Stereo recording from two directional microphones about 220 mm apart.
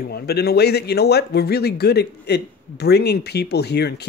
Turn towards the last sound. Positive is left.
turn(degrees=50)  # may be behind; listen again after turning